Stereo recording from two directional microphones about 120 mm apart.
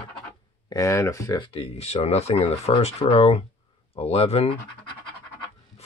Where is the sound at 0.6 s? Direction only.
25° left (ahead or behind).